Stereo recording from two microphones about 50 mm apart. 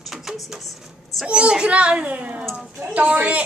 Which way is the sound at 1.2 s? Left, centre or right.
Centre.